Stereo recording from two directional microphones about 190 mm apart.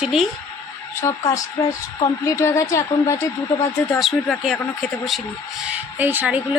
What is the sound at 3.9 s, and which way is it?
Speech, centre (ahead or behind).